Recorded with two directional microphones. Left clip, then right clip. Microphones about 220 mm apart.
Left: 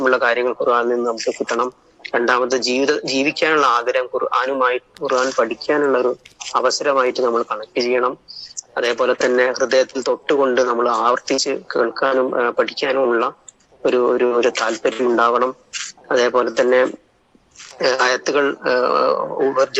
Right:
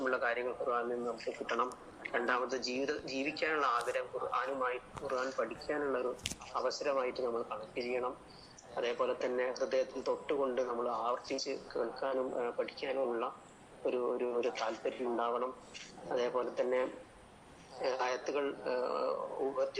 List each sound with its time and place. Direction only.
0.0 s a man's voice: 45° left (ahead or behind)